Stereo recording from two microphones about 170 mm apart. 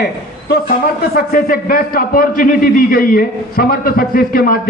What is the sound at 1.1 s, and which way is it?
A man's voice, 60° left (ahead or behind).